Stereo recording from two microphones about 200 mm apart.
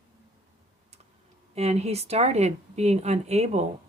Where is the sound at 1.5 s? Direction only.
30° right (ahead or behind).